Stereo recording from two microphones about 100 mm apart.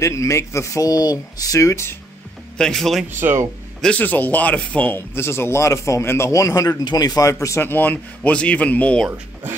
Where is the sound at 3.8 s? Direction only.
15° left (ahead or behind); by 7.6 s 30° left (ahead or behind).